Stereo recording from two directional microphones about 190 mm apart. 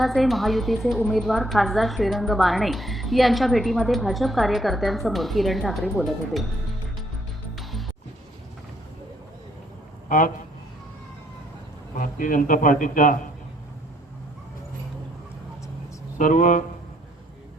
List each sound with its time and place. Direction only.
0.0 s a woman's voice: centre (ahead or behind)
7.5 s music: centre (ahead or behind)
10.1 s a man's voice: 45° left (ahead or behind)
11.9 s a man's voice: 45° left (ahead or behind)
16.1 s a man's voice: 40° left (ahead or behind)